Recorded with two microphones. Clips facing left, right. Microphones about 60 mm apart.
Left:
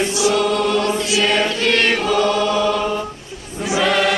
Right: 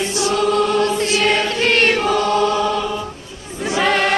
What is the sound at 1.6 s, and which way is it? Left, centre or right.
Choir, right.